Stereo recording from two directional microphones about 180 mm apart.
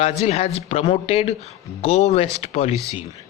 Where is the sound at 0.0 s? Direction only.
35° left (ahead or behind).